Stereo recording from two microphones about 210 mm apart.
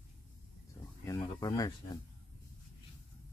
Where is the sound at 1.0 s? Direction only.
15° left (ahead or behind).